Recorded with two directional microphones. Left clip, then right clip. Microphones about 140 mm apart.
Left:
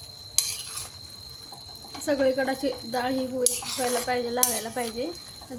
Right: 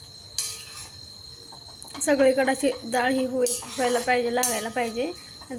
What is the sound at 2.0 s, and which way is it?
Speech, 20° right (ahead or behind).